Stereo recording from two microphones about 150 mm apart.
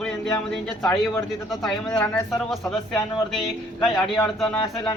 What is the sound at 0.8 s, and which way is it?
Speech, 20° left (ahead or behind).